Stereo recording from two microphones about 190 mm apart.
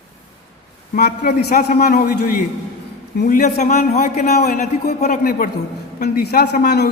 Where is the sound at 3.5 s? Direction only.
35° left (ahead or behind).